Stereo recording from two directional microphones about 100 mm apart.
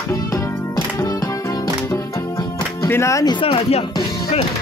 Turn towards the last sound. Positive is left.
turn(degrees=70)  # may be behind; listen again after turning